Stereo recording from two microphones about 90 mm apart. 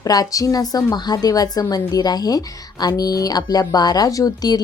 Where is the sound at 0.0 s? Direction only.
40° left (ahead or behind).